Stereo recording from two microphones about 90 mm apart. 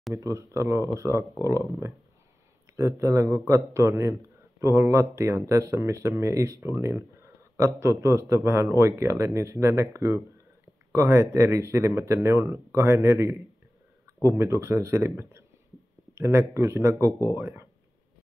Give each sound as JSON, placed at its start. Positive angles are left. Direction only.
{"t": 0.1, "sound": "a man's voice", "side_deg": -35}